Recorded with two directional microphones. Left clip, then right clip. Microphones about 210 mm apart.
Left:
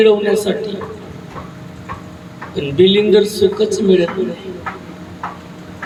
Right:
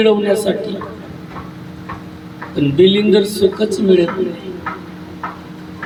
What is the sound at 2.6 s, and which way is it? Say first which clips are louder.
A man's voice: even; 50° left (ahead or behind).